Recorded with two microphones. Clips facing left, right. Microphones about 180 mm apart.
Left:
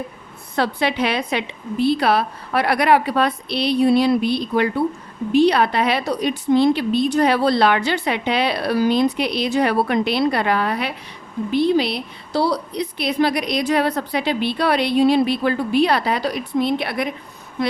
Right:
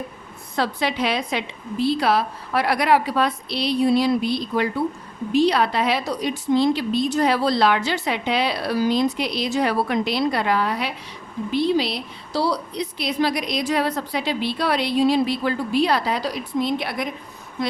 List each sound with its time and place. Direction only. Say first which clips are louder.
0.5 s a woman's voice: left 3 dB; 60° left (ahead or behind)